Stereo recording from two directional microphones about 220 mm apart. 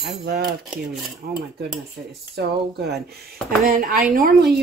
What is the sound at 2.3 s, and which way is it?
A woman's voice, 50° right (ahead or behind).